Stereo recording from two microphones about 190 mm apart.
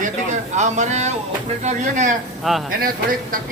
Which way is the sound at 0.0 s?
40° right (ahead or behind).